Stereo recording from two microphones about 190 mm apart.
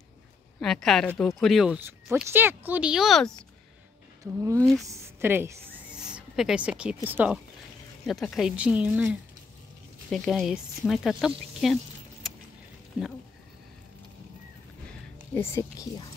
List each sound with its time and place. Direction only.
0.6 s speech: centre (ahead or behind)
4.4 s speech: 15° right (ahead or behind)
8.1 s speech: centre (ahead or behind)
15.3 s speech: 15° left (ahead or behind)